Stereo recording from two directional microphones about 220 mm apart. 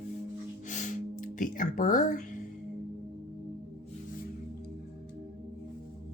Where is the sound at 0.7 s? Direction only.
35° left (ahead or behind).